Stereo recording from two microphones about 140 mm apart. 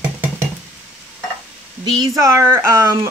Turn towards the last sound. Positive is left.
turn(degrees=-20)  # may be behind; listen again after turning